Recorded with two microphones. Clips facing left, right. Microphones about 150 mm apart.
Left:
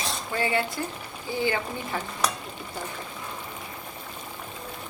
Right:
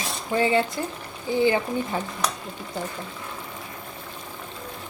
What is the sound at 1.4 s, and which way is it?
Speech, 20° right (ahead or behind).